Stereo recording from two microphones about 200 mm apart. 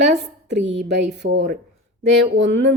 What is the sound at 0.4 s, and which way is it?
A woman's voice, 60° right (ahead or behind).